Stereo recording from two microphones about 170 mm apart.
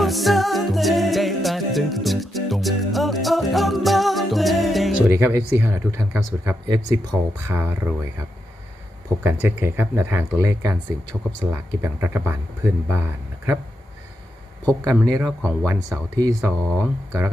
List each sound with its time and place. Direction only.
0.0 s music: centre (ahead or behind)
5.0 s speech: 15° right (ahead or behind)
9.2 s speech: 15° right (ahead or behind)
15.0 s speech: 20° right (ahead or behind)